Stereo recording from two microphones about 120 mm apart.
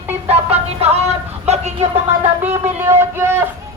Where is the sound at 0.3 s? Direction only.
60° right (ahead or behind).